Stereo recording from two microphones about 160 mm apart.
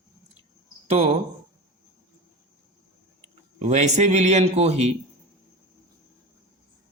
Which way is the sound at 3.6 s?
45° right (ahead or behind).